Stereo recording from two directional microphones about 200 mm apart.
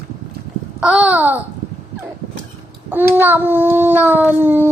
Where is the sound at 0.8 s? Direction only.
5° right (ahead or behind).